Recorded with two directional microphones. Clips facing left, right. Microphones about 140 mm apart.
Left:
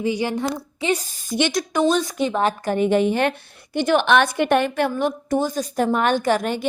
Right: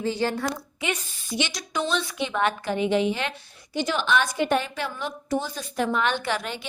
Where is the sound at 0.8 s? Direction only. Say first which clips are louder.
Left 7 dB; 35° left (ahead or behind).